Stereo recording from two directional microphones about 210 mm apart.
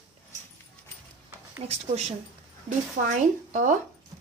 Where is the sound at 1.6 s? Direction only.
30° right (ahead or behind).